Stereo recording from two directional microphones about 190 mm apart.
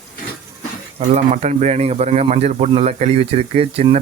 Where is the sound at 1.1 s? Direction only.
35° right (ahead or behind).